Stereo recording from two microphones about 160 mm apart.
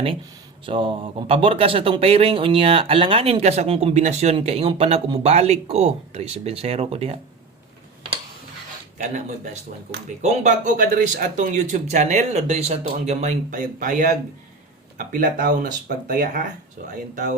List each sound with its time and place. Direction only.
0.6 s speech: 35° right (ahead or behind)
9.0 s speech: 50° right (ahead or behind); by 17.3 s 65° right (ahead or behind)